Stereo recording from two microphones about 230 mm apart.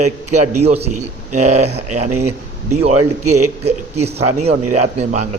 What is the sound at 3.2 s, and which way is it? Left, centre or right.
Speech, right.